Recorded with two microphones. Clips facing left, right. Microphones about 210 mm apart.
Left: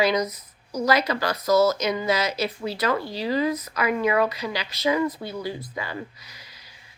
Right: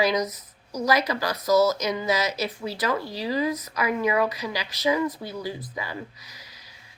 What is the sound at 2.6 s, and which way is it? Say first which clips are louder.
Speech: left 2 dB; 15° right (ahead or behind).